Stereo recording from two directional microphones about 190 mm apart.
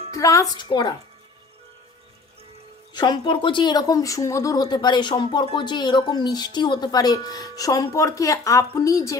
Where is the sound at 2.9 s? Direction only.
20° left (ahead or behind).